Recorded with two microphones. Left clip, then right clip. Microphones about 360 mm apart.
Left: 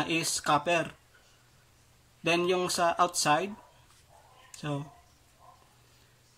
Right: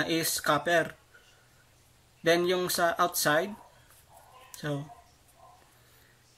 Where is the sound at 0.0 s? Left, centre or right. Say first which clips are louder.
Right 1 dB; centre.